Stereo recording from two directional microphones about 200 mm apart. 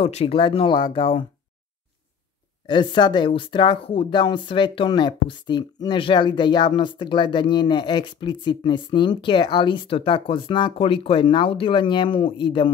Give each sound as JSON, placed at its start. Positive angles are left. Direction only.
{"t": 0.0, "sound": "speech", "side_deg": 30}
{"t": 2.6, "sound": "speech", "side_deg": 25}